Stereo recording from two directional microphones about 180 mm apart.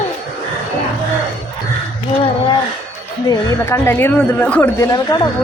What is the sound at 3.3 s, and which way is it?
A woman's voice, 15° left (ahead or behind).